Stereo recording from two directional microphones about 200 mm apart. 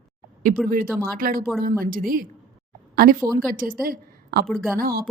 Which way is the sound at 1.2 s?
45° right (ahead or behind).